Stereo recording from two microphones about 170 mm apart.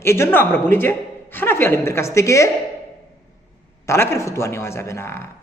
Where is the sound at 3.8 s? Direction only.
15° left (ahead or behind).